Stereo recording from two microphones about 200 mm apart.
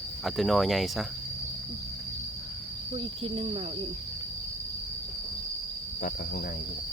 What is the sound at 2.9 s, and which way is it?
Speech, 30° right (ahead or behind).